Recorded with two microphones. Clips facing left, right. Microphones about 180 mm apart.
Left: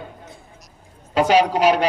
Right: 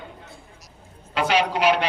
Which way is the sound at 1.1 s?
40° left (ahead or behind).